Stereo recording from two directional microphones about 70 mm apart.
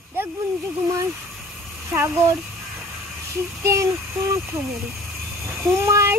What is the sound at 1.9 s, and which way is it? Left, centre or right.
Speech, right.